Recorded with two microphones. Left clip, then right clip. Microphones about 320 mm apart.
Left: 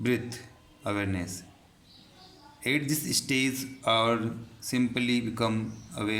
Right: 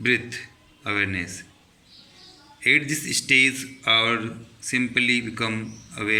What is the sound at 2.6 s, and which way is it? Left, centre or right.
A man's voice, centre.